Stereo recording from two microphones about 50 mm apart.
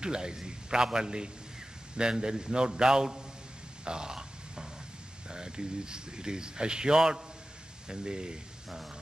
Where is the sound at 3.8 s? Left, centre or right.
Centre.